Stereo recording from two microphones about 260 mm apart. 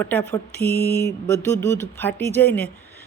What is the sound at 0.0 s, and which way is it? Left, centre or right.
Mantra, centre.